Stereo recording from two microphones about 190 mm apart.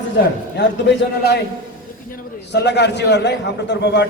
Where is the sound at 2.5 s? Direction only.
65° left (ahead or behind).